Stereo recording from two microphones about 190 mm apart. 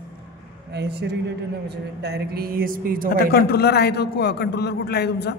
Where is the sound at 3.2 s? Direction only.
55° left (ahead or behind).